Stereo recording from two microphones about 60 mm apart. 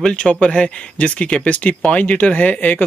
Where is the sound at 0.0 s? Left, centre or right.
Centre.